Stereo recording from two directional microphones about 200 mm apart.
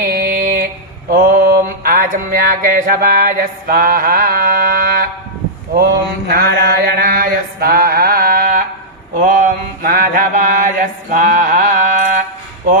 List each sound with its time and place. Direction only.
0.0 s a sound: 50° right (ahead or behind)
1.1 s mantra: 40° right (ahead or behind)
6.2 s mantra: 50° right (ahead or behind)